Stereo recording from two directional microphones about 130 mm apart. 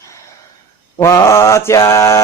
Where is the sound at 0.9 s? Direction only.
20° left (ahead or behind).